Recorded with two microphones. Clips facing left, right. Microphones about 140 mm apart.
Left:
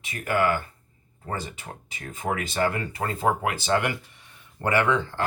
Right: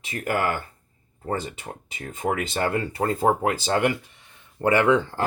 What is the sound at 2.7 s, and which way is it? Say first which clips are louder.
Speech: right 5 dB; 30° right (ahead or behind).